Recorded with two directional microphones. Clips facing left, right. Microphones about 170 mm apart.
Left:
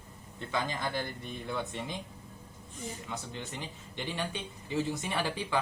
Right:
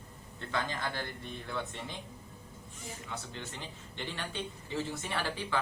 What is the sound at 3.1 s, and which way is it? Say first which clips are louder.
A man's voice: left 2 dB; 15° left (ahead or behind).